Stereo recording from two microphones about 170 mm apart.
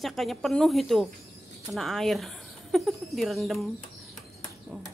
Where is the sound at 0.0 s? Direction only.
Centre (ahead or behind).